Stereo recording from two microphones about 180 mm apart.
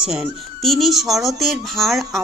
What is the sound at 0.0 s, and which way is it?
A woman's voice, 5° right (ahead or behind).